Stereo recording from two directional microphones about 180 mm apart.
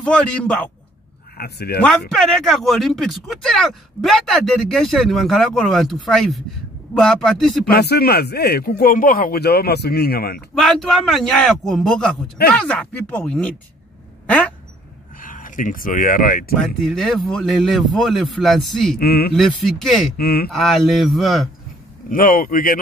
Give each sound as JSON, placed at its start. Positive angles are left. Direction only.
{"t": 0.0, "sound": "speech", "side_deg": 5}
{"t": 1.4, "sound": "speech", "side_deg": 60}
{"t": 1.8, "sound": "speech", "side_deg": 5}
{"t": 7.7, "sound": "speech", "side_deg": 60}
{"t": 10.5, "sound": "speech", "side_deg": 0}
{"t": 14.2, "sound": "quack", "side_deg": 5}
{"t": 15.1, "sound": "speech", "side_deg": 50}
{"t": 16.5, "sound": "speech", "side_deg": 0}
{"t": 18.9, "sound": "speech", "side_deg": 60}
{"t": 19.3, "sound": "speech", "side_deg": 0}
{"t": 20.2, "sound": "speech", "side_deg": 60}
{"t": 20.4, "sound": "speech", "side_deg": 0}
{"t": 22.1, "sound": "speech", "side_deg": 50}